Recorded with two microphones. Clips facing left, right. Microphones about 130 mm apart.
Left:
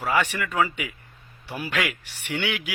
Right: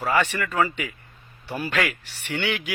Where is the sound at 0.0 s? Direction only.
10° left (ahead or behind).